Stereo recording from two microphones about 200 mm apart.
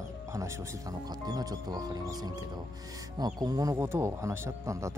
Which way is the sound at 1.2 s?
20° right (ahead or behind).